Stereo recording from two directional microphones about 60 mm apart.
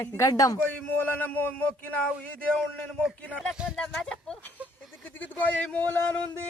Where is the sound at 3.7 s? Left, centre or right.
Centre.